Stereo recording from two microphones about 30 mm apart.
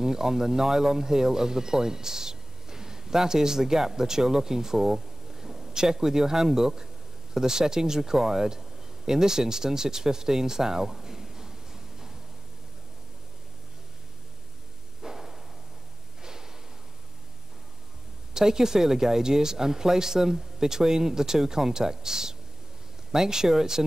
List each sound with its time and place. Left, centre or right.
0.0 s speech: centre
15.0 s a sound: centre
16.2 s snort: centre
18.3 s speech: centre